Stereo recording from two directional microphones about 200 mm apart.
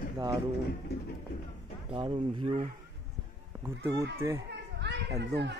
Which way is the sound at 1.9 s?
25° right (ahead or behind).